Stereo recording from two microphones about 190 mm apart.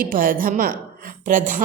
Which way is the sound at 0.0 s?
50° right (ahead or behind).